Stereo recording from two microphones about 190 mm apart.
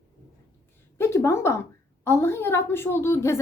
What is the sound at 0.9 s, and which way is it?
A woman's voice, 15° left (ahead or behind).